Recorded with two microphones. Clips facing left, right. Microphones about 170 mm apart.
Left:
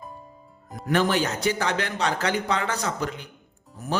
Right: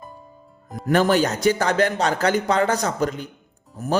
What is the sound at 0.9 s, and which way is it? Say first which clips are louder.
Music: right 5 dB; 40° right (ahead or behind).